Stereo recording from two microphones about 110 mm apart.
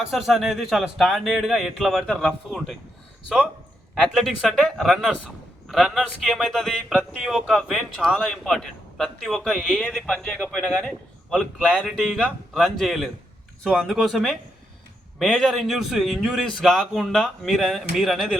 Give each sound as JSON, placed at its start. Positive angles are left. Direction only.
{"t": 0.0, "sound": "a man's voice", "side_deg": 0}
{"t": 3.2, "sound": "a man's voice", "side_deg": -5}